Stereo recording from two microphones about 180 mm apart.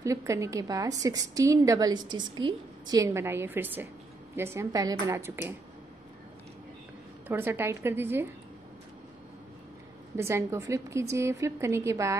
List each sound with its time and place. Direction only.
0.0 s a woman's voice: 15° right (ahead or behind)
7.2 s a woman's voice: 10° right (ahead or behind)
10.1 s a woman's voice: 15° right (ahead or behind)